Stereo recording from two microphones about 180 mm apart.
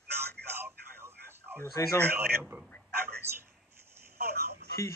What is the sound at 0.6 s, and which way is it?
Telephone, 10° right (ahead or behind).